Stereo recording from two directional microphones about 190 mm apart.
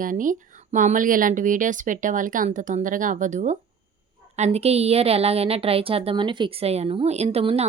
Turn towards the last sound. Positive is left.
turn(degrees=-30)  # may be behind; listen again after turning